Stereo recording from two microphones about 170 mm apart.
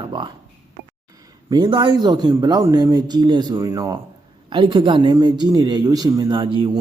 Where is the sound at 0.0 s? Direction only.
30° right (ahead or behind).